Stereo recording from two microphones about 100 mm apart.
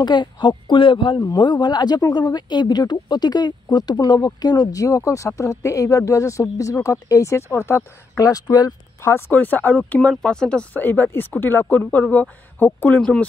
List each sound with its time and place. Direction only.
0.0 s speech: 50° left (ahead or behind)
1.2 s speech: 45° left (ahead or behind)
9.1 s speech: 20° left (ahead or behind)